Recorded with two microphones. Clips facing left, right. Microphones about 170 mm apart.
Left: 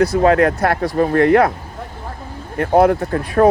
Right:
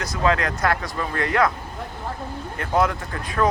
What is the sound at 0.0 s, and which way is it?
Speech, 60° left (ahead or behind).